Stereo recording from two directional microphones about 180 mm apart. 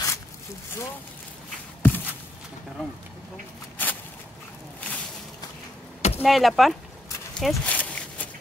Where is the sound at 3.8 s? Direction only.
10° left (ahead or behind).